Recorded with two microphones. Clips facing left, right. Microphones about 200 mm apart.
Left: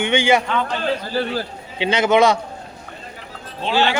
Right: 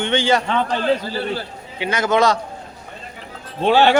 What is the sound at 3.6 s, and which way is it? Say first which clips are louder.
Speech: right 5 dB; 55° right (ahead or behind).